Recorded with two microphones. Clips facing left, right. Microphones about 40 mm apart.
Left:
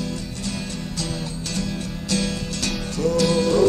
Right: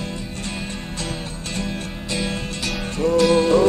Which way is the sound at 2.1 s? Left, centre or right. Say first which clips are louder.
Left 1 dB; right.